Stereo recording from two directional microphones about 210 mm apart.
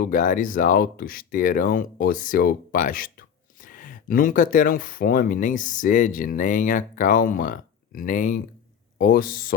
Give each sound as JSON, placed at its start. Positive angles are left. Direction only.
{"t": 0.0, "sound": "speech", "side_deg": 40}